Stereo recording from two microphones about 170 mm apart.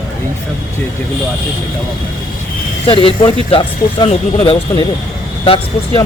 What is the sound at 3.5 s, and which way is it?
Speech, 30° left (ahead or behind).